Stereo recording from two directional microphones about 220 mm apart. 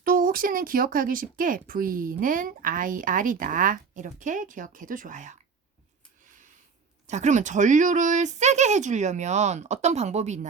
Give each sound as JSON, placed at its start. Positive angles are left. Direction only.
{"t": 0.0, "sound": "speech", "side_deg": -40}
{"t": 7.1, "sound": "speech", "side_deg": -30}